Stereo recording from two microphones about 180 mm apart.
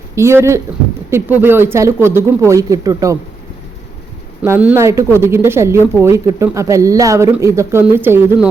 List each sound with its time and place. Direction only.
0.2 s a woman's voice: 15° right (ahead or behind)
4.4 s a woman's voice: 10° right (ahead or behind)